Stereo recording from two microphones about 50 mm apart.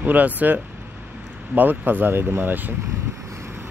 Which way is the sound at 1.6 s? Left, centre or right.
Right.